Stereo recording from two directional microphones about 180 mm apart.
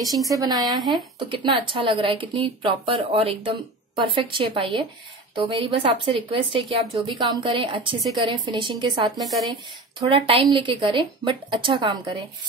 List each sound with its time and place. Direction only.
0.3 s speech: 20° right (ahead or behind)
9.1 s speech: centre (ahead or behind)
9.9 s speech: 30° right (ahead or behind)